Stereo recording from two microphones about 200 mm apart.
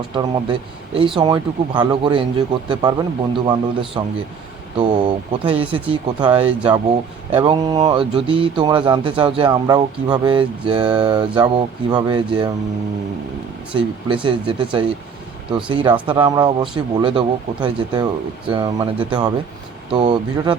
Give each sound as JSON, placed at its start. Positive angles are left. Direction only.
{"t": 0.1, "sound": "speech", "side_deg": -25}
{"t": 13.7, "sound": "speech", "side_deg": -25}
{"t": 16.0, "sound": "speech", "side_deg": -25}